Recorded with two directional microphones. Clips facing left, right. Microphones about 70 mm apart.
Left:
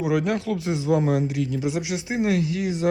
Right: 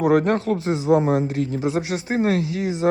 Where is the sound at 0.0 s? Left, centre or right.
Right.